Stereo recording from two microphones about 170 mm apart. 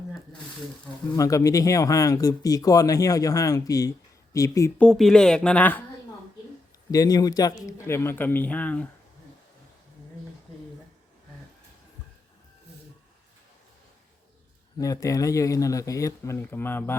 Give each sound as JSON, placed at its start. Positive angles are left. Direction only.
{"t": 1.1, "sound": "speech", "side_deg": 20}
{"t": 4.8, "sound": "a woman's voice", "side_deg": 5}
{"t": 6.9, "sound": "a man's voice", "side_deg": 20}
{"t": 14.8, "sound": "speech", "side_deg": 20}